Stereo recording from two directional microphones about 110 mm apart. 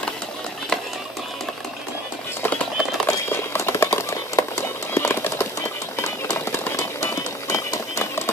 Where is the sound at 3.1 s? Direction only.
25° left (ahead or behind).